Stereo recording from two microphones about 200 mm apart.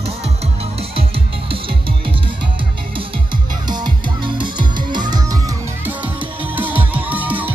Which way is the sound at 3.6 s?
20° right (ahead or behind).